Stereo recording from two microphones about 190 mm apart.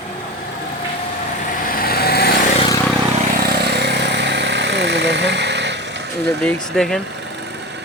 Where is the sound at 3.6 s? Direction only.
60° right (ahead or behind).